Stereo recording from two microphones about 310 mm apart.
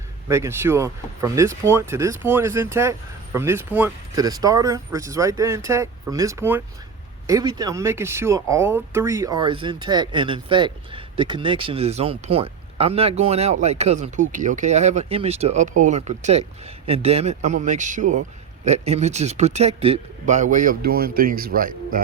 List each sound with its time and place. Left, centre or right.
0.3 s speech: centre; by 22.0 s right